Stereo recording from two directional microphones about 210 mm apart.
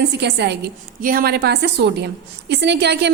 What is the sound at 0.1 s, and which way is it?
A woman's voice, 55° right (ahead or behind).